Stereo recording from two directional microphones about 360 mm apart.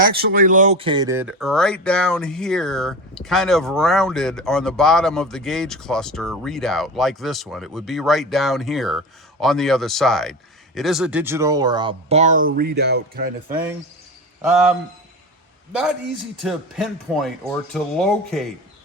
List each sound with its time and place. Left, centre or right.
0.0 s speech: right
16.4 s speech: centre